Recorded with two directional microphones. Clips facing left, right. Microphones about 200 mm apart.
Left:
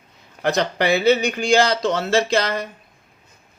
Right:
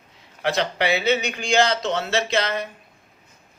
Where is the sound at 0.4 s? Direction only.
45° left (ahead or behind).